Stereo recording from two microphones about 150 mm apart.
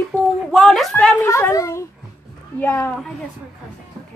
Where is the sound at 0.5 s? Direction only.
Centre (ahead or behind).